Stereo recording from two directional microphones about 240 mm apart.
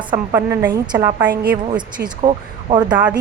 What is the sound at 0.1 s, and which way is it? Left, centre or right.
A woman's voice, centre.